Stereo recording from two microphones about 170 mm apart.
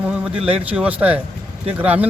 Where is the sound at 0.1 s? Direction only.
5° right (ahead or behind).